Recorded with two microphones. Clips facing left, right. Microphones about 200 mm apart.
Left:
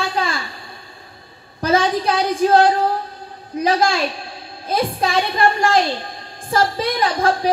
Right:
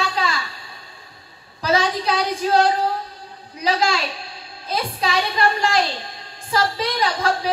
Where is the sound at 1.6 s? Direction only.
50° left (ahead or behind).